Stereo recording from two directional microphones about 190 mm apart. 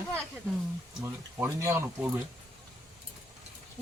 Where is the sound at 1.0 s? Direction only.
10° right (ahead or behind).